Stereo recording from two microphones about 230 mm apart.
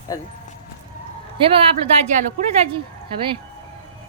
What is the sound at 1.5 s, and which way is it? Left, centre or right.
A woman's voice, right.